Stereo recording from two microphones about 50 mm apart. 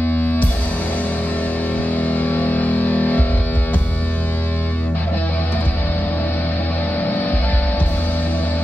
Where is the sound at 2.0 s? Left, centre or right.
Left.